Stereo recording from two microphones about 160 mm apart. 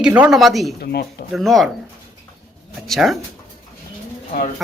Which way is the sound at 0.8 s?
75° left (ahead or behind).